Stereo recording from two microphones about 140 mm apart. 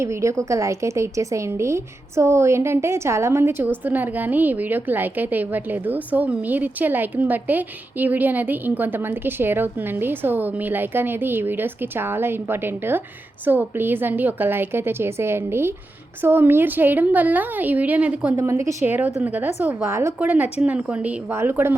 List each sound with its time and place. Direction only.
0.0 s a woman's voice: 20° right (ahead or behind)
18.3 s a woman's voice: 20° right (ahead or behind)